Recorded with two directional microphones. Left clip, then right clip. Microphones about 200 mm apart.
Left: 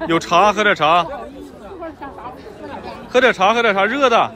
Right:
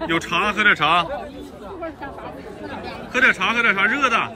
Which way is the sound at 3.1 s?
25° left (ahead or behind).